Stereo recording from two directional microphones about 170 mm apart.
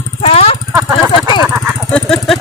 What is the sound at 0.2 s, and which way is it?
Jackhammer, 35° left (ahead or behind).